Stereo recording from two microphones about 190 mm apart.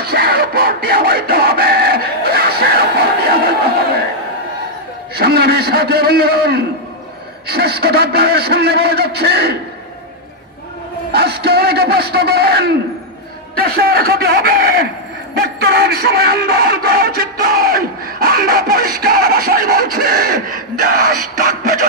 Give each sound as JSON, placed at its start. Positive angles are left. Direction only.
{"t": 0.0, "sound": "music", "side_deg": -55}
{"t": 5.1, "sound": "a man's voice", "side_deg": -55}
{"t": 11.1, "sound": "a man's voice", "side_deg": -55}